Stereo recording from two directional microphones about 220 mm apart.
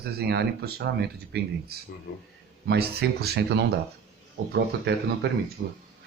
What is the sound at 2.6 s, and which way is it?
A man's voice, 45° right (ahead or behind).